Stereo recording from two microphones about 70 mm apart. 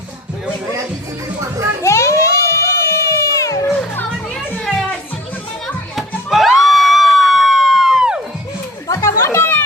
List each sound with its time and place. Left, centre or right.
1.8 s music: left
4.6 s music: centre
5.6 s children playing: centre
6.7 s music: centre
8.9 s chatter: left